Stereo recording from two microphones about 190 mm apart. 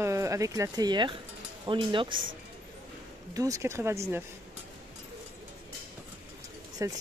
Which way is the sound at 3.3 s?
15° right (ahead or behind).